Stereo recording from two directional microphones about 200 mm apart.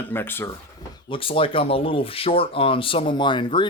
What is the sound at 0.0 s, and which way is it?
Speech, 10° left (ahead or behind).